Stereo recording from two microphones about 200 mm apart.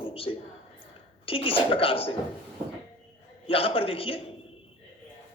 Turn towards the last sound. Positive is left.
turn(degrees=25)  # may be behind; listen again after turning